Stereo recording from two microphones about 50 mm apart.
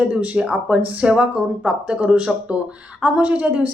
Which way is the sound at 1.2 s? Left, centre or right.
Right.